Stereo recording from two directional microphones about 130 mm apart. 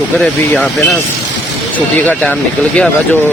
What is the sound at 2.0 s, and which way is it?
Speech, 10° left (ahead or behind).